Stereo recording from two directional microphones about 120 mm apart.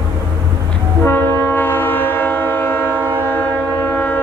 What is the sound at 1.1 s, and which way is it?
Train, 15° left (ahead or behind).